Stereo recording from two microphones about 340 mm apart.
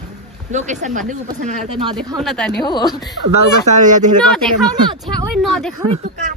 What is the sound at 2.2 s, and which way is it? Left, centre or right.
Speech, centre.